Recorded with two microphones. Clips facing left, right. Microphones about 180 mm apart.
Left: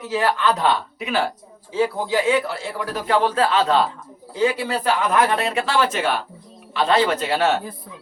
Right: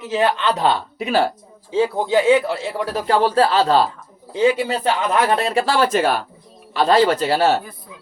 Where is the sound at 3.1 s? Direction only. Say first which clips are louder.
Right 3 dB; 35° right (ahead or behind).